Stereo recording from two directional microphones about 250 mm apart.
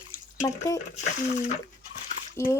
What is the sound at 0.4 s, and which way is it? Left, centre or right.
Speech, centre.